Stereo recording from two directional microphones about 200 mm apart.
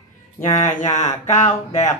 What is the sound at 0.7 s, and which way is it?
Speech, 35° left (ahead or behind).